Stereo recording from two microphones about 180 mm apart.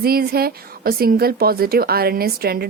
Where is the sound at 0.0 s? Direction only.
55° right (ahead or behind).